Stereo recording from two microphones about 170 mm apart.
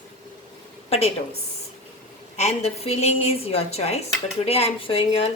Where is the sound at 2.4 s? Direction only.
40° left (ahead or behind).